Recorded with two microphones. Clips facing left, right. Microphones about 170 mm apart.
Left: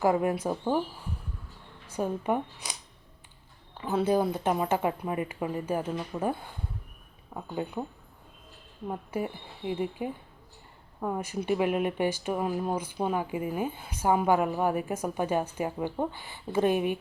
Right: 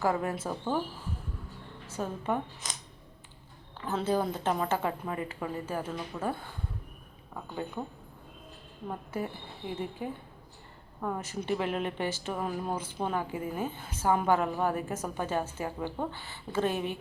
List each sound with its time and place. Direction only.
0.0 s speech: 15° left (ahead or behind)
1.9 s speech: 15° left (ahead or behind)
3.8 s speech: 10° left (ahead or behind)
7.3 s speech: 15° left (ahead or behind)
8.9 s speech: 10° left (ahead or behind)